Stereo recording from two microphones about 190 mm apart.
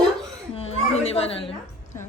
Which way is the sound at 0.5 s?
30° left (ahead or behind).